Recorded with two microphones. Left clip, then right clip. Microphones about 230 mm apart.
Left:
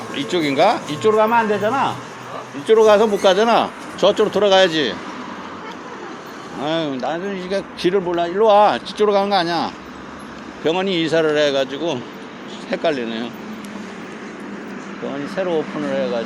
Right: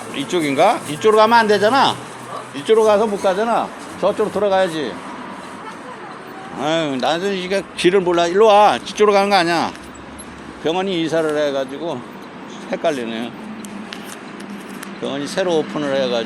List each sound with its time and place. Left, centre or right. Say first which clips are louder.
0.1 s speech: even; centre
1.1 s speech: right 4 dB; right
2.7 s speech: left 2 dB; centre
3.2 s speech: left 3 dB; centre
6.6 s speech: right 3 dB; centre
8.4 s speech: left 1 dB; centre
10.6 s speech: left 1 dB; centre
15.0 s speech: right 3 dB; right